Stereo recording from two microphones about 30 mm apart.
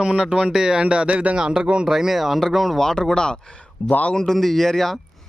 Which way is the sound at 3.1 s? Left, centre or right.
Left.